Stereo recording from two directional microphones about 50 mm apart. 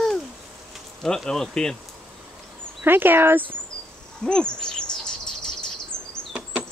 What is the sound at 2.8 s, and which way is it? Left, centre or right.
Speech, right.